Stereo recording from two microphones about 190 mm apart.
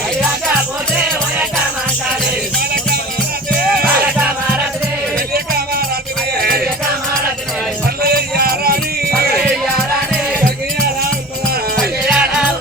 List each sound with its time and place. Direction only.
5.3 s music: 55° right (ahead or behind)
8.0 s music: 55° right (ahead or behind)
11.8 s music: centre (ahead or behind)